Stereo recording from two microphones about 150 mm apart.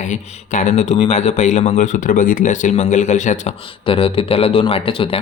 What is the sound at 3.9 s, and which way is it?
Speech, 40° left (ahead or behind).